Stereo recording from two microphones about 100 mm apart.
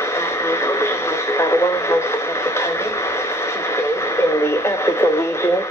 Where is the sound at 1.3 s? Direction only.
30° left (ahead or behind).